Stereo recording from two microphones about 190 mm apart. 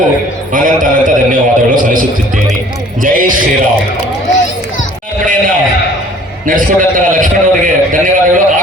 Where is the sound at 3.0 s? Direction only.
45° right (ahead or behind).